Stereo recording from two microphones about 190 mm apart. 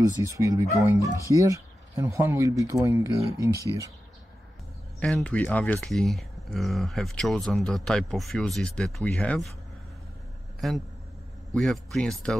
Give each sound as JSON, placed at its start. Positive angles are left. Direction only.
{"t": 0.0, "sound": "speech", "side_deg": -15}
{"t": 5.0, "sound": "speech", "side_deg": 5}
{"t": 10.6, "sound": "speech", "side_deg": 0}